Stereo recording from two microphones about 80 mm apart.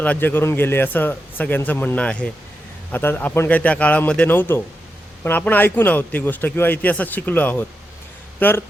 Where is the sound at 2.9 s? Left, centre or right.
Left.